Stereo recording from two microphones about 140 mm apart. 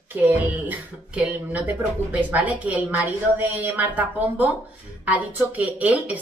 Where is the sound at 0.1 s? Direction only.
10° right (ahead or behind).